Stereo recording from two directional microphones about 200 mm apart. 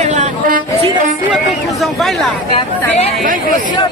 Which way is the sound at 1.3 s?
Centre (ahead or behind).